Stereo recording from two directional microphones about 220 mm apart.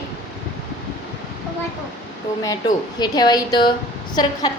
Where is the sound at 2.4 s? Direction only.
20° left (ahead or behind).